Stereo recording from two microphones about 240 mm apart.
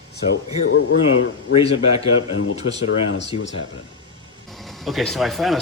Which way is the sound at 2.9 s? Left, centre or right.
Left.